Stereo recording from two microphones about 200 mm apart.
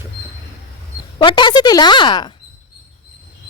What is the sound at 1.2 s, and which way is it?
Speech, 25° left (ahead or behind).